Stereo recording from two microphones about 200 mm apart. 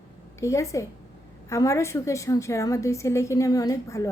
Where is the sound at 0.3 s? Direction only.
15° left (ahead or behind).